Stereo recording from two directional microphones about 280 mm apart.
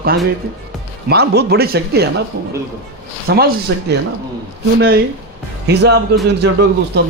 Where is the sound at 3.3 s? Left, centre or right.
Right.